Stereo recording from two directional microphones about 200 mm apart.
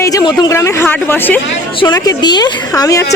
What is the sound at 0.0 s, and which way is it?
A woman's voice, 20° left (ahead or behind).